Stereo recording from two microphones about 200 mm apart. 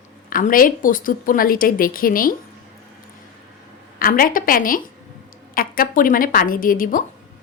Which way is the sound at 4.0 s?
45° left (ahead or behind).